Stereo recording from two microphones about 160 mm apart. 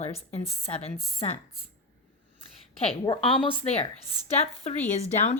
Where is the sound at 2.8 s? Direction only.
30° left (ahead or behind).